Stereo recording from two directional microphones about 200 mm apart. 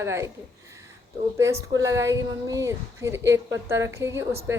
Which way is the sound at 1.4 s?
15° right (ahead or behind).